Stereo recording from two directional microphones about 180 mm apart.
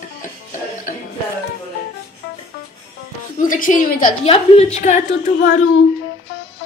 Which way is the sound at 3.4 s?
50° left (ahead or behind).